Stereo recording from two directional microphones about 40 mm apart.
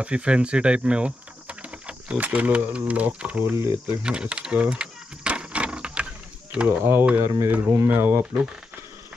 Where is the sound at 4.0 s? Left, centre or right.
Right.